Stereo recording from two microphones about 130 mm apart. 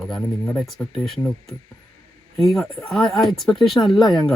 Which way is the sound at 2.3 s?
Centre (ahead or behind).